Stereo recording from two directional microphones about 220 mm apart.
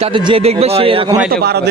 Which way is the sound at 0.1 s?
25° right (ahead or behind).